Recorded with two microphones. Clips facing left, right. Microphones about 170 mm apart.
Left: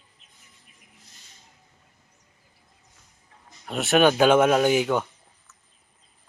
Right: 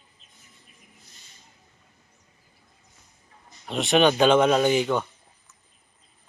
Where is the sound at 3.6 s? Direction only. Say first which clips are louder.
Left 1 dB; 5° left (ahead or behind).